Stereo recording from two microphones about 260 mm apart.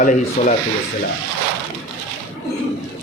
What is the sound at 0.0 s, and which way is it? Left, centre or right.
Speech, left.